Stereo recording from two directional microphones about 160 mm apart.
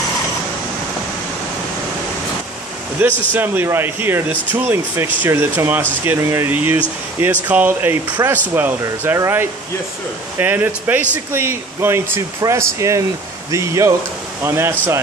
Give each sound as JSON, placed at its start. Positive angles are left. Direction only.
{"t": 3.0, "sound": "speech", "side_deg": -10}